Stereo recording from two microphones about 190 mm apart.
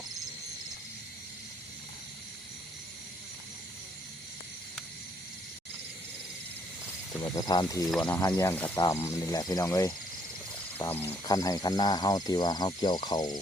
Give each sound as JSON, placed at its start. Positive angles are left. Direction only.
{"t": 7.2, "sound": "speech", "side_deg": 20}